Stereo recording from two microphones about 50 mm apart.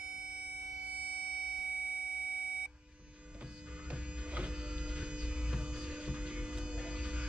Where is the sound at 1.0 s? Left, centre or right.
Right.